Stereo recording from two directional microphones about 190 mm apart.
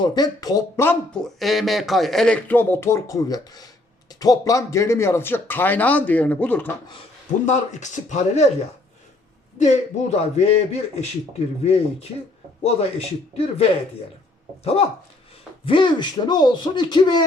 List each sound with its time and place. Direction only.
0.0 s speech: 20° left (ahead or behind)
7.4 s a man's voice: 40° left (ahead or behind)
9.6 s a man's voice: 35° left (ahead or behind)